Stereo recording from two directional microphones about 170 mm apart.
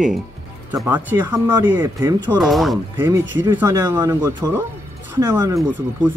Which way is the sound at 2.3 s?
Centre (ahead or behind).